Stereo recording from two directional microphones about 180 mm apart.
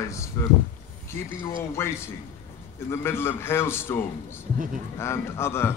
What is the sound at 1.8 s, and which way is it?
A man's voice, 15° left (ahead or behind).